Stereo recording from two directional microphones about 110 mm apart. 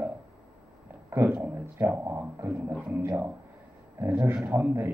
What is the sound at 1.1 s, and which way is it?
Speech, 15° right (ahead or behind).